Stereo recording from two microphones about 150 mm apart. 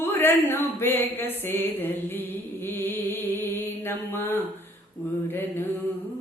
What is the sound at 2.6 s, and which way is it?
Mantra, 15° left (ahead or behind).